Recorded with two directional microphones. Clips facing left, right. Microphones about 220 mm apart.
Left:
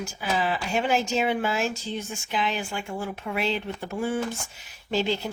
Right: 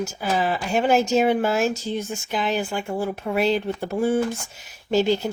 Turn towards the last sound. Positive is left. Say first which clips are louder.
# right 6 dB
turn(degrees=-45)  # may be behind; listen again after turning